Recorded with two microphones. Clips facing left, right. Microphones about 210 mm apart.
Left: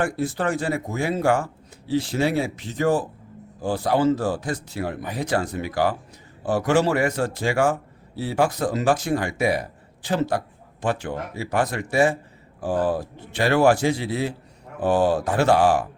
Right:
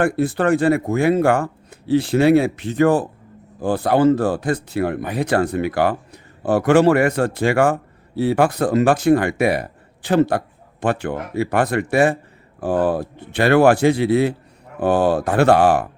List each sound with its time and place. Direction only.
0.0 s a man's voice: 60° right (ahead or behind)